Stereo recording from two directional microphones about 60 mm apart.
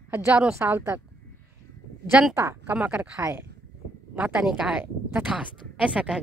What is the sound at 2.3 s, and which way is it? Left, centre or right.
Speech, right.